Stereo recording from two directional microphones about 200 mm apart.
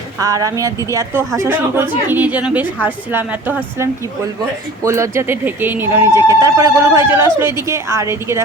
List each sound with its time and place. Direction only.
0.2 s speech: 15° right (ahead or behind)